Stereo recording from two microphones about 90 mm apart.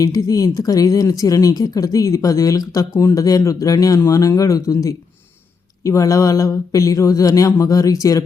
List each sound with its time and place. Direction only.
0.0 s speech: 40° left (ahead or behind)
2.9 s speech: 30° left (ahead or behind)